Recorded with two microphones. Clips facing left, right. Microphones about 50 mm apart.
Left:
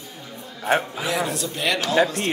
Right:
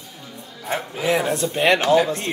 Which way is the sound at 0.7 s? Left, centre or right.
Left.